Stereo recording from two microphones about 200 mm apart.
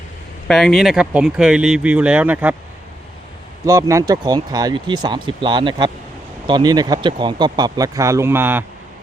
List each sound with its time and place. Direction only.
0.4 s speech: centre (ahead or behind)
3.7 s speech: 15° right (ahead or behind)